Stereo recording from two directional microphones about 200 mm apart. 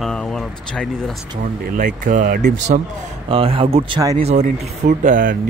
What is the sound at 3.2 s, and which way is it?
Speech, 25° right (ahead or behind).